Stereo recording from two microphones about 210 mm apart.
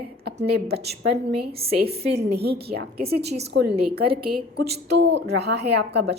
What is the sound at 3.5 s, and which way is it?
A woman's voice, 55° right (ahead or behind).